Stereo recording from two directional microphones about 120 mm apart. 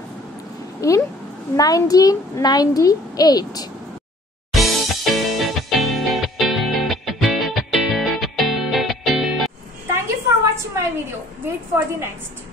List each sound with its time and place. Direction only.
0.7 s a child's voice: 25° left (ahead or behind)
4.5 s music: centre (ahead or behind)
10.4 s a sound: 25° right (ahead or behind)
11.4 s a woman's voice: 20° right (ahead or behind)